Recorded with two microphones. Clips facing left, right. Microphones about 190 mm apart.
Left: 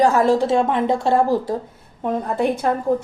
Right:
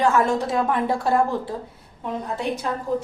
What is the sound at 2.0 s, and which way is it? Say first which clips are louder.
Speech: left 7 dB; 50° left (ahead or behind).